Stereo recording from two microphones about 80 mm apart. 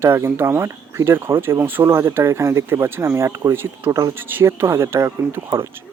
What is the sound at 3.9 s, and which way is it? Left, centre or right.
Speech, right.